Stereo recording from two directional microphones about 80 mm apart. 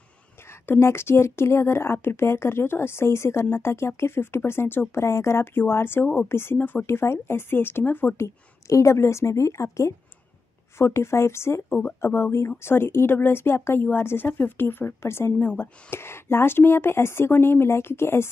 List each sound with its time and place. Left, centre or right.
0.5 s a woman's voice: left
8.2 s a woman's voice: left